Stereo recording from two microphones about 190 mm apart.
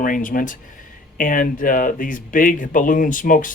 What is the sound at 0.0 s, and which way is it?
Speech, 45° left (ahead or behind).